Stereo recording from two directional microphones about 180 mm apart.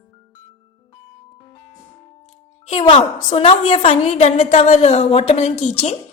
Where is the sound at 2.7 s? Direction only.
30° left (ahead or behind).